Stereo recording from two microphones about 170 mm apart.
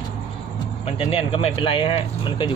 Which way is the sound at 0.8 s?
35° left (ahead or behind).